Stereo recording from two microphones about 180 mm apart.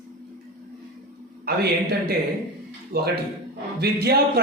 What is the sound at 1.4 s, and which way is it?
Speech, 60° right (ahead or behind).